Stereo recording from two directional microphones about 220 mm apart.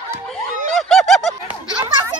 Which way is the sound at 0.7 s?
Centre (ahead or behind).